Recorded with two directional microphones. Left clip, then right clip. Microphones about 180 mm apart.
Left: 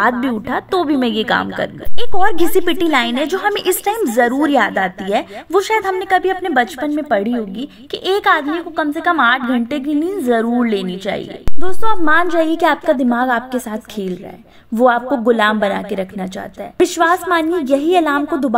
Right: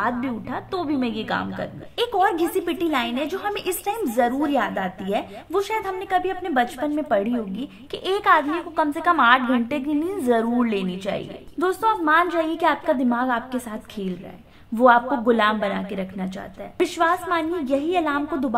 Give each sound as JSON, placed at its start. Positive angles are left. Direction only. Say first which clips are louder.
{"t": 0.0, "sound": "a woman's voice", "louder": "left 9 dB", "side_deg": 45}